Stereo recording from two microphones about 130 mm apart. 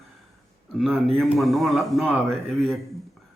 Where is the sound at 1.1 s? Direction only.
Centre (ahead or behind).